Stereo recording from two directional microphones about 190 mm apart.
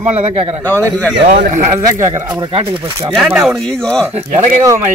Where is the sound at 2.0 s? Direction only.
15° right (ahead or behind).